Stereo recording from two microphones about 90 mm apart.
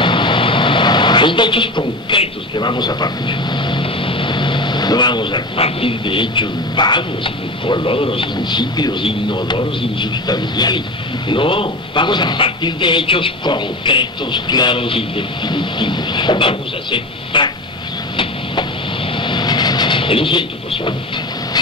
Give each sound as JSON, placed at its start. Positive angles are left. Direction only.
{"t": 0.0, "sound": "speech", "side_deg": 65}
{"t": 11.2, "sound": "speech", "side_deg": 70}
{"t": 14.8, "sound": "speech", "side_deg": 85}
{"t": 18.1, "sound": "vehicle", "side_deg": 70}